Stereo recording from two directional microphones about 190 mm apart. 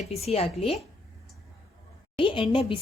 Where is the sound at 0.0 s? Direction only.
35° left (ahead or behind).